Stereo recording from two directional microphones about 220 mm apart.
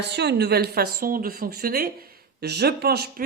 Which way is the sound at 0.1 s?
50° right (ahead or behind).